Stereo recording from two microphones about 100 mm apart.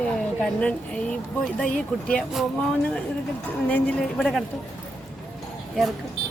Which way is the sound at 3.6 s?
15° left (ahead or behind).